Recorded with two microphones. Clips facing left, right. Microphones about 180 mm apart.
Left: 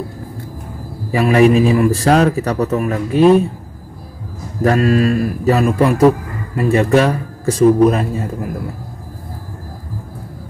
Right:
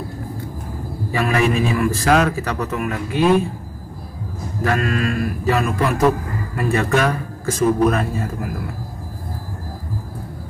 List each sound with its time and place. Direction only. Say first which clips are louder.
1.1 s a man's voice: left 8 dB; 35° left (ahead or behind)
4.6 s a man's voice: left 7 dB; 35° left (ahead or behind)